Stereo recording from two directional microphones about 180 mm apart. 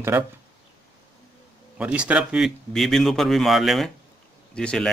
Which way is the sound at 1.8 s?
5° right (ahead or behind).